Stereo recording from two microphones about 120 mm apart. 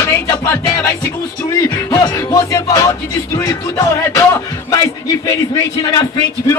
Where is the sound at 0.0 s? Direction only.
25° left (ahead or behind).